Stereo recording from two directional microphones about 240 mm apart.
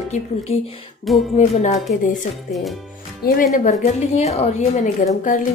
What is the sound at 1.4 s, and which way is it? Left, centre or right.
Speech, left.